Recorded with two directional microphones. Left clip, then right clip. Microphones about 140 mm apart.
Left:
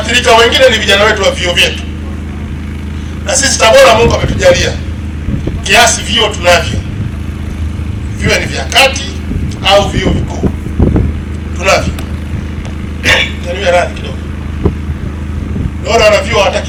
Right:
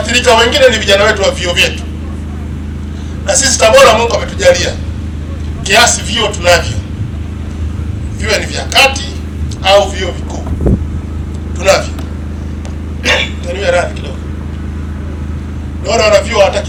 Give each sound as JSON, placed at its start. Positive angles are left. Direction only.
{"t": 0.0, "sound": "a man's voice", "side_deg": -15}
{"t": 3.2, "sound": "a man's voice", "side_deg": -15}
{"t": 8.2, "sound": "a man's voice", "side_deg": -15}
{"t": 11.6, "sound": "speech", "side_deg": -15}
{"t": 13.0, "sound": "a sound", "side_deg": -15}
{"t": 15.9, "sound": "a man's voice", "side_deg": -15}